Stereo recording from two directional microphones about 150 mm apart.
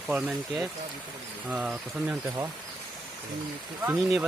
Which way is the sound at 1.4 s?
5° right (ahead or behind).